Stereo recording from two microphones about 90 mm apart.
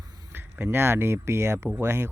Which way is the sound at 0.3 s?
25° right (ahead or behind).